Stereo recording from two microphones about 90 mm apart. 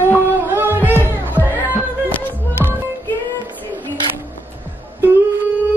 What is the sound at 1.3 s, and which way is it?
Music, 20° left (ahead or behind).